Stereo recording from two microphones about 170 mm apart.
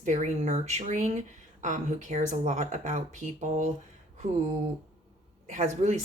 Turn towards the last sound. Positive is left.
turn(degrees=-45)  # may be behind; listen again after turning